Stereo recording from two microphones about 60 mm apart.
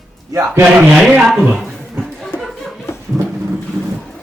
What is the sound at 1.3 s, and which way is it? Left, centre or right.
Speech, centre.